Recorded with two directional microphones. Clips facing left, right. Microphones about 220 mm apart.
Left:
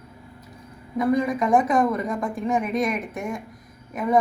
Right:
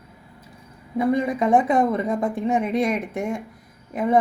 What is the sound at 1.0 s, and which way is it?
Speech, 25° right (ahead or behind).